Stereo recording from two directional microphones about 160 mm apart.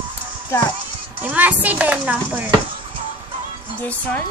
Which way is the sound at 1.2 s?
10° right (ahead or behind).